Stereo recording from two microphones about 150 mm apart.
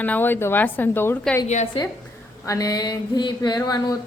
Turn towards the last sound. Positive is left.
turn(degrees=25)  # may be behind; listen again after turning